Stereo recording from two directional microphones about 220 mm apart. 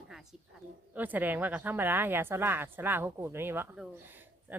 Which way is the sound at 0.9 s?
10° right (ahead or behind).